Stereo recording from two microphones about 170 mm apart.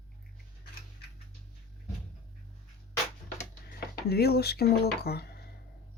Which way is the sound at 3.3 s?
65° left (ahead or behind).